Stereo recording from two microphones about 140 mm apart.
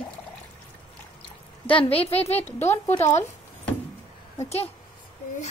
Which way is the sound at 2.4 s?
15° left (ahead or behind).